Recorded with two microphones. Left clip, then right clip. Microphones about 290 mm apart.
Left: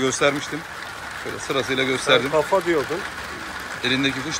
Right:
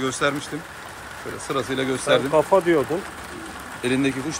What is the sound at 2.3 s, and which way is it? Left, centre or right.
Speech, right.